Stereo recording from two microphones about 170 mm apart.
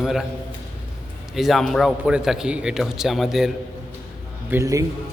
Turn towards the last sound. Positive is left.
turn(degrees=-20)  # may be behind; listen again after turning